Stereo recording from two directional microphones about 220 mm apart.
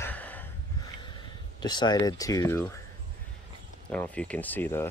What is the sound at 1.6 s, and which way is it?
Speech, 20° left (ahead or behind).